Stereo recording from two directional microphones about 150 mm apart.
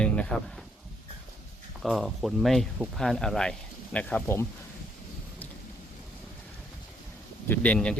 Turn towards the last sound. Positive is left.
turn(degrees=10)  # may be behind; listen again after turning